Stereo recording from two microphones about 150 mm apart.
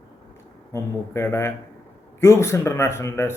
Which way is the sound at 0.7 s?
15° left (ahead or behind).